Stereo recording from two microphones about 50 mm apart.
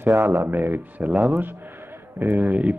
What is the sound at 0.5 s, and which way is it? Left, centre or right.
Speech, right.